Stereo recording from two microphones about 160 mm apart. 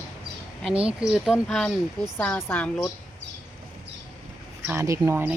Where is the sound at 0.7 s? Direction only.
35° right (ahead or behind).